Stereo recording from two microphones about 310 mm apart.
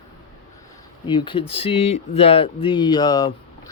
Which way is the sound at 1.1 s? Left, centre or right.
Centre.